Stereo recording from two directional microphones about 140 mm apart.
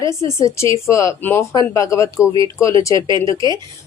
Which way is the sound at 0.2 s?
20° left (ahead or behind).